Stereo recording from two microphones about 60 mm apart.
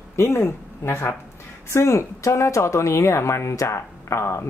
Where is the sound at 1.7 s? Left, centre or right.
Left.